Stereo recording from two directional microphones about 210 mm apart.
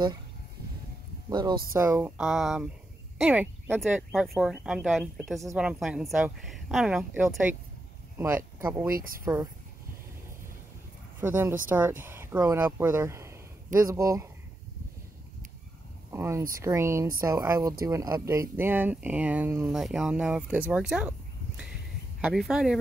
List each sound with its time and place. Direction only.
1.8 s speech: 10° right (ahead or behind)
8.9 s speech: 40° right (ahead or behind)
9.2 s speech: 15° right (ahead or behind)
11.1 s speech: 10° right (ahead or behind)
16.1 s speech: 10° right (ahead or behind)
22.2 s speech: centre (ahead or behind)